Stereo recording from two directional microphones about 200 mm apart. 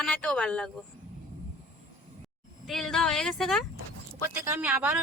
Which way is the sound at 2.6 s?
Centre (ahead or behind).